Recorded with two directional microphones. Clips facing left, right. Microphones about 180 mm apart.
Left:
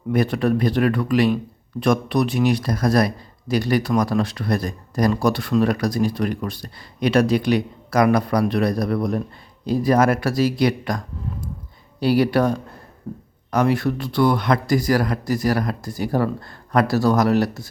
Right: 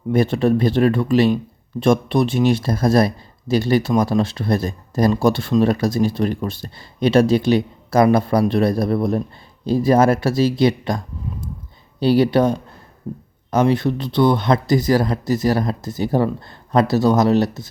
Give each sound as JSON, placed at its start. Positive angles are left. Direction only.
{"t": 0.1, "sound": "speech", "side_deg": -25}